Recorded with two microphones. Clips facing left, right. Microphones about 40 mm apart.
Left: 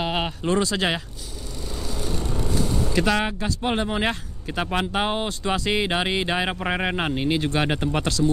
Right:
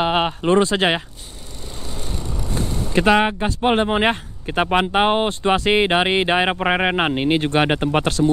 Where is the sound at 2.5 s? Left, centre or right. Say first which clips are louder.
Even; right.